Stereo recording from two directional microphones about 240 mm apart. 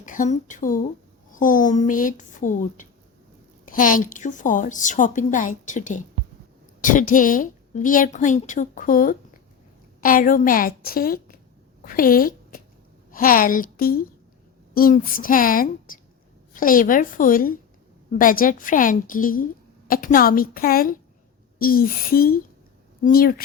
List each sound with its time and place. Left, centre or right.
0.0 s a woman's voice: left